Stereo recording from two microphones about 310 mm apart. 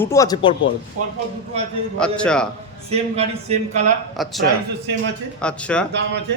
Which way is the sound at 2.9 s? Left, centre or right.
Centre.